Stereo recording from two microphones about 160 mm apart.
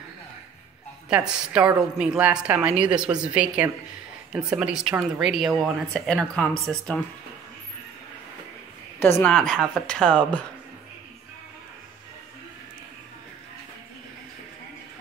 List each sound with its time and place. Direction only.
1.1 s a woman's voice: 5° right (ahead or behind)
9.0 s speech: 10° left (ahead or behind)